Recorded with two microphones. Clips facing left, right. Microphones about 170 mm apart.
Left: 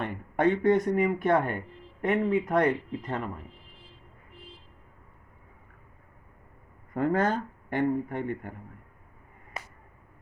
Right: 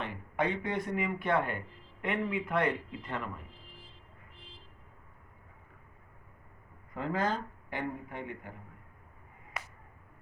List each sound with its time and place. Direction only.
0.0 s speech: 50° left (ahead or behind)
6.9 s speech: 50° left (ahead or behind)